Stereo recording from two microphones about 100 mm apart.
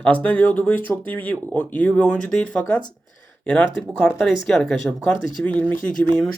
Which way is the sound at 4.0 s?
Centre (ahead or behind).